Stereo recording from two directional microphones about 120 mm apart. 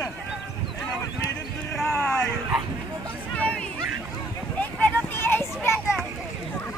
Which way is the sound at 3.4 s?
10° left (ahead or behind).